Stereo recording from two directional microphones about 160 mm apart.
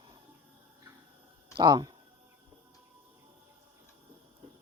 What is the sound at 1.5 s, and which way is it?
Speech, 25° right (ahead or behind).